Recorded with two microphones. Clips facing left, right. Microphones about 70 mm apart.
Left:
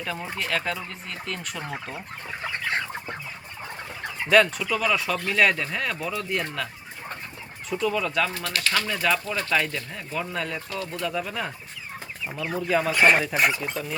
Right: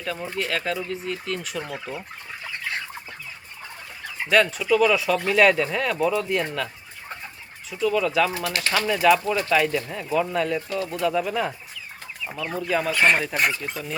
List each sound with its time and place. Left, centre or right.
0.0 s speech: centre
1.6 s speech: left
2.5 s chicken: left
4.3 s speech: centre
7.7 s speech: centre
8.5 s speech: right
8.9 s speech: centre
9.2 s speech: centre
9.5 s speech: centre